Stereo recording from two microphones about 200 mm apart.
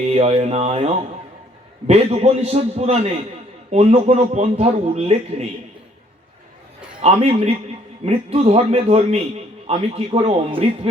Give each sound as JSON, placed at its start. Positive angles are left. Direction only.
{"t": 0.0, "sound": "a man's voice", "side_deg": -30}
{"t": 7.0, "sound": "a man's voice", "side_deg": -30}